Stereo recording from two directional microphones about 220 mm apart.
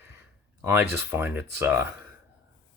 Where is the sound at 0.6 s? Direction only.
10° right (ahead or behind).